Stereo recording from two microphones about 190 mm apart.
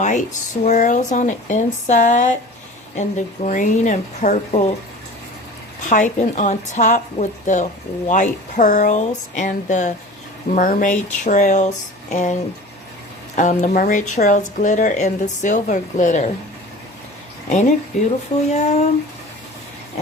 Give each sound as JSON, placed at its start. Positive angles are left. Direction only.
{"t": 0.0, "sound": "speech", "side_deg": 40}
{"t": 5.8, "sound": "speech", "side_deg": 40}
{"t": 17.5, "sound": "speech", "side_deg": 40}